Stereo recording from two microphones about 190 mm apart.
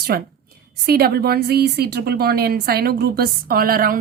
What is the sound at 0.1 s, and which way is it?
A woman's voice, 55° right (ahead or behind).